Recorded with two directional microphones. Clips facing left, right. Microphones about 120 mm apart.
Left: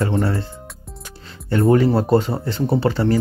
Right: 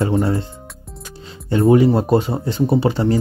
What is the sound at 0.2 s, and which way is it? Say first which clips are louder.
Speech: right 2 dB; 20° right (ahead or behind).